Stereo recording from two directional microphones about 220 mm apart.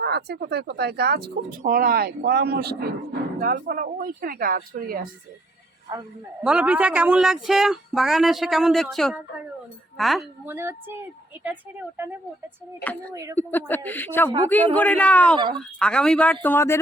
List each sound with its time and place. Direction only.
0.0 s speech: 50° right (ahead or behind)
6.4 s a woman's voice: 5° right (ahead or behind)
12.8 s speech: 10° left (ahead or behind)